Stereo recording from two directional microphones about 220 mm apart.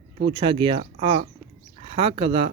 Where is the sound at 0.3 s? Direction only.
20° right (ahead or behind).